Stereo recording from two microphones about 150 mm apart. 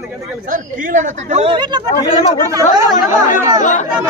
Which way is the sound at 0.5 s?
60° right (ahead or behind).